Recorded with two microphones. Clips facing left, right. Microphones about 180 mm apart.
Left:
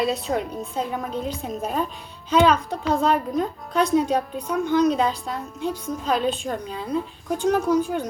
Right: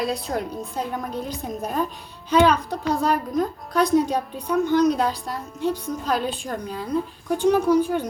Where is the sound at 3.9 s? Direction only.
Centre (ahead or behind).